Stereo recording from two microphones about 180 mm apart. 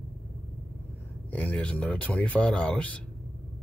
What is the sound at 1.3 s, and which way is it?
Speech, 10° left (ahead or behind).